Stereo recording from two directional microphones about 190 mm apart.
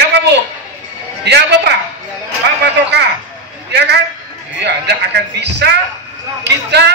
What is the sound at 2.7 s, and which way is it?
A man's voice, 60° right (ahead or behind).